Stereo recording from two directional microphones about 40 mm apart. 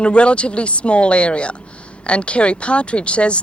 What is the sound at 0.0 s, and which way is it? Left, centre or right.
Speech, left.